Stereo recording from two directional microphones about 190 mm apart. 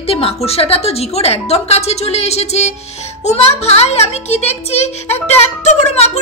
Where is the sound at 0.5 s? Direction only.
30° left (ahead or behind).